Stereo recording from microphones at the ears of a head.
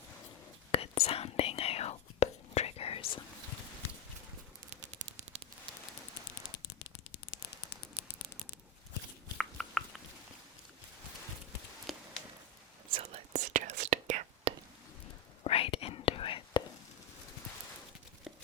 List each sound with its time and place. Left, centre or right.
0.7 s whispering: left
4.7 s a sound: right
6.2 s a sound: left
9.4 s chewing: centre
12.9 s whispering: right
15.4 s whispering: left